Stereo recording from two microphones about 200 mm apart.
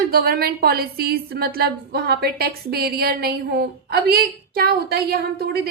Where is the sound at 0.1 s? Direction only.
50° right (ahead or behind).